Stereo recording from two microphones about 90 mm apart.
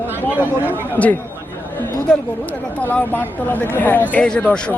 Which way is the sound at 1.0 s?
20° left (ahead or behind).